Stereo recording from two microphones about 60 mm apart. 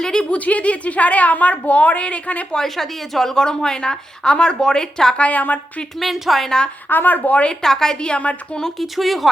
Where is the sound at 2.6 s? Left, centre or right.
Centre.